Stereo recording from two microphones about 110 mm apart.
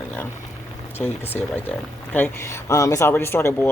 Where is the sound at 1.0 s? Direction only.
15° left (ahead or behind).